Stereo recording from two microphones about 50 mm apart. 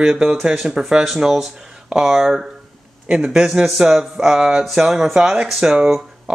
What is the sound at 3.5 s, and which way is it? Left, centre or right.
Speech, centre.